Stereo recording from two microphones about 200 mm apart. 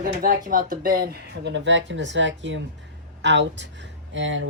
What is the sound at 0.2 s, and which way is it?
Speech, 45° right (ahead or behind).